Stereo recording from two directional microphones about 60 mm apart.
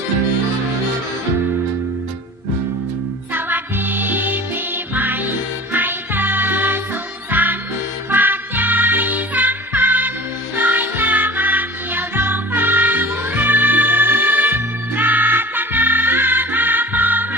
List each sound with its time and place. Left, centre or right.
3.3 s music: right